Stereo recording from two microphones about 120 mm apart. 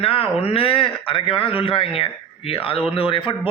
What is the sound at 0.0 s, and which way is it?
Speech, 50° left (ahead or behind).